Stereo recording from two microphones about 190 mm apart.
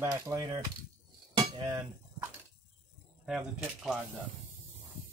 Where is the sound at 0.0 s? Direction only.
15° right (ahead or behind).